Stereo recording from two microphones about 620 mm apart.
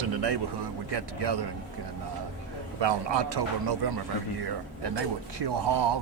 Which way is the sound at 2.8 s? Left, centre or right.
Right.